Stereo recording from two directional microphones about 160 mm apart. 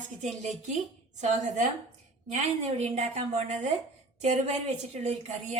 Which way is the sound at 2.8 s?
45° right (ahead or behind).